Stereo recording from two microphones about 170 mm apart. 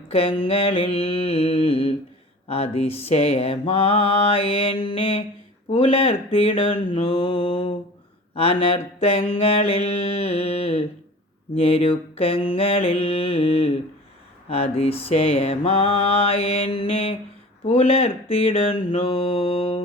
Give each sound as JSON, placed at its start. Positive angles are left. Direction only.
{"t": 0.1, "sound": "mantra", "side_deg": 35}